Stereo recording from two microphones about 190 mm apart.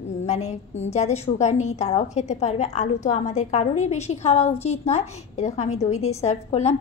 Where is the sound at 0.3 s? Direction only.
35° left (ahead or behind).